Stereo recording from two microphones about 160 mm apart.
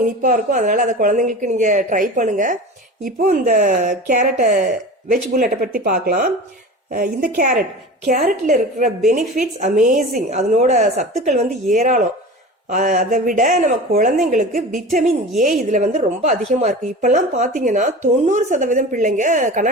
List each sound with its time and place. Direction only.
0.0 s a woman's voice: 55° right (ahead or behind)